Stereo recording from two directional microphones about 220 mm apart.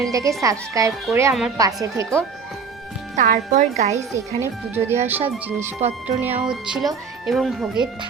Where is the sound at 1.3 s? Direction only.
Centre (ahead or behind).